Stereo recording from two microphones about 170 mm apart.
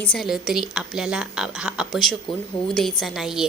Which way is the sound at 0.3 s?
Centre (ahead or behind).